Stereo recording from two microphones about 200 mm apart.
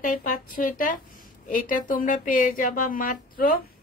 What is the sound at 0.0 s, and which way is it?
Speech, 40° left (ahead or behind).